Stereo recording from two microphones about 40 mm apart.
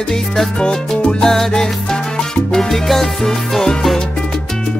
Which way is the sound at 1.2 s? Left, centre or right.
Centre.